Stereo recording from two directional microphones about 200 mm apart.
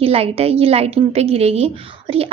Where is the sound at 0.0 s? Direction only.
30° right (ahead or behind).